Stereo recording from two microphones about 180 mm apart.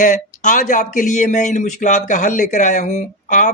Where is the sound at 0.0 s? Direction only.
45° left (ahead or behind).